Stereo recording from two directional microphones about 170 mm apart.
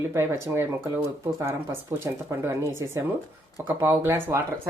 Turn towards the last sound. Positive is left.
turn(degrees=-15)  # may be behind; listen again after turning